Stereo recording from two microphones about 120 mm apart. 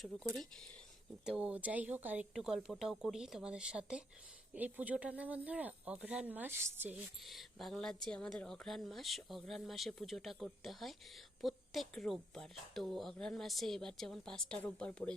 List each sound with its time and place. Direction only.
1.2 s speech: 5° right (ahead or behind)
7.3 s speech: centre (ahead or behind)